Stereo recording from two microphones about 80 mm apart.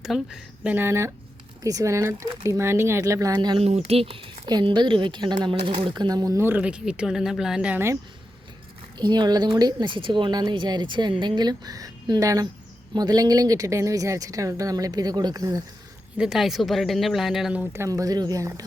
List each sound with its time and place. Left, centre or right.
0.0 s speech: centre
0.6 s speech: right
3.3 s a woman's voice: right
4.2 s speech: right
6.4 s speech: centre
9.0 s a woman's voice: right
10.5 s a woman's voice: right
12.9 s speech: right
16.1 s speech: centre
17.8 s speech: right